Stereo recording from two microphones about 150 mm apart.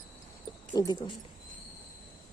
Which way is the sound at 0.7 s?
25° left (ahead or behind).